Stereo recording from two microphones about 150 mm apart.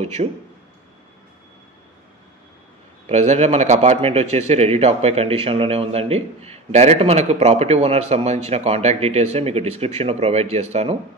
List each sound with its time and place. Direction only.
0.0 s a man's voice: 45° right (ahead or behind)
3.1 s a man's voice: 50° right (ahead or behind)